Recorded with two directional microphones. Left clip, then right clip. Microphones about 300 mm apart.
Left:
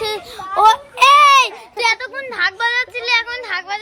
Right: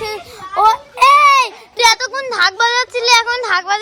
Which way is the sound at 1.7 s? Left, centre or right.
Right.